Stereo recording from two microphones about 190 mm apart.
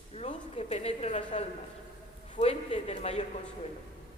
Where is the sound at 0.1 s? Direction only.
30° left (ahead or behind).